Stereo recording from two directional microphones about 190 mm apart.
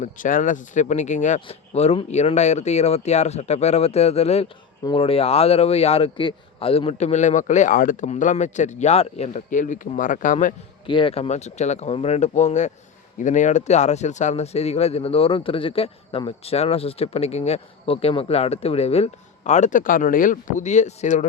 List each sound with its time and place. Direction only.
0.0 s speech: 45° left (ahead or behind)
10.8 s speech: 25° left (ahead or behind)